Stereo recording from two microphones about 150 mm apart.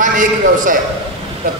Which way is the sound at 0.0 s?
60° right (ahead or behind).